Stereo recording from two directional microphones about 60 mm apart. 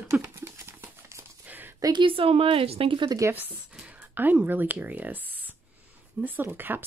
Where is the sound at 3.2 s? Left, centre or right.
Right.